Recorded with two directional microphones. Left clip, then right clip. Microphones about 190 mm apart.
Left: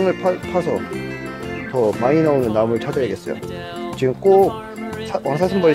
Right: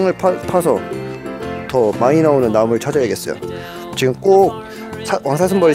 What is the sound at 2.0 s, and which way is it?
Speech, 40° right (ahead or behind).